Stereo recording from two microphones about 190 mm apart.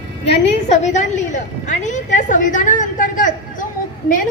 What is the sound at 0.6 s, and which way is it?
A woman's voice, 40° left (ahead or behind).